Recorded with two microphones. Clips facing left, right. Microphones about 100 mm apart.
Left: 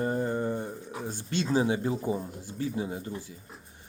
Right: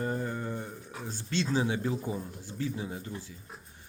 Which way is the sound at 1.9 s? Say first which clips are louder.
Left 3 dB; 20° left (ahead or behind).